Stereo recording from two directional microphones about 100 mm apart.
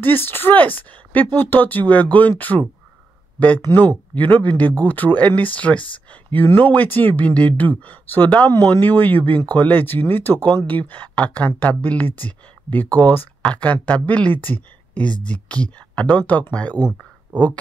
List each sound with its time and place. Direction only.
0.0 s speech: 20° left (ahead or behind)